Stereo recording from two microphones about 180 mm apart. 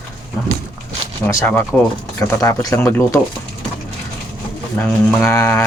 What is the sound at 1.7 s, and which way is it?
Speech, centre (ahead or behind).